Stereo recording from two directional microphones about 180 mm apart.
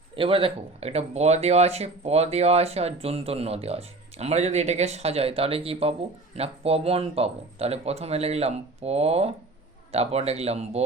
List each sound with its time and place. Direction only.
0.2 s speech: 30° right (ahead or behind)